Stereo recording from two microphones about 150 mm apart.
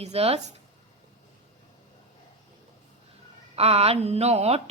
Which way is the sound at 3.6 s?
40° right (ahead or behind).